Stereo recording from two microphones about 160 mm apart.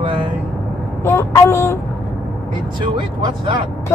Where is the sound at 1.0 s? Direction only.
15° left (ahead or behind).